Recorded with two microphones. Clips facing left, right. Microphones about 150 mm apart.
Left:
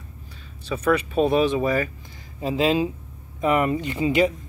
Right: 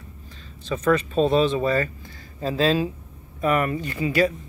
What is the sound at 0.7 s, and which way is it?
Speech, 10° left (ahead or behind).